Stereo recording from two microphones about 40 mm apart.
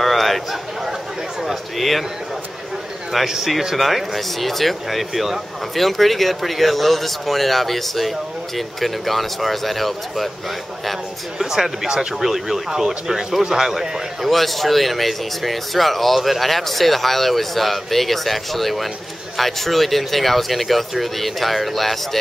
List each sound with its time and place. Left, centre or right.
0.0 s a sound: centre
1.4 s speech: centre
3.3 s speech: centre
11.3 s speech: centre